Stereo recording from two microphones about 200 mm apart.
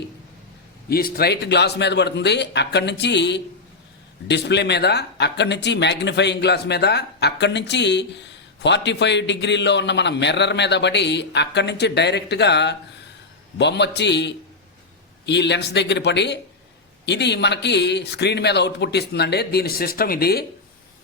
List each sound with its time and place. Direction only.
0.9 s speech: 50° left (ahead or behind)